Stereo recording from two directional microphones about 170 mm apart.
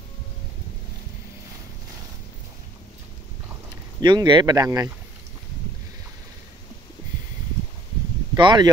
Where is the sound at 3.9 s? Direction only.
25° right (ahead or behind).